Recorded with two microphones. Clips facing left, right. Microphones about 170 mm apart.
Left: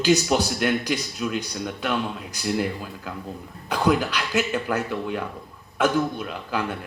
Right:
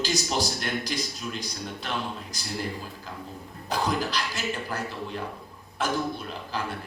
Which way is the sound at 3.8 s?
65° left (ahead or behind).